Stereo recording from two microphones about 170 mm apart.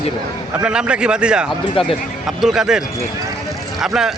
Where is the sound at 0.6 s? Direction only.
5° right (ahead or behind).